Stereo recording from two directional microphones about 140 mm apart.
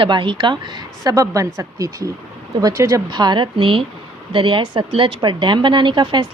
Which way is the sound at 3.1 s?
30° right (ahead or behind).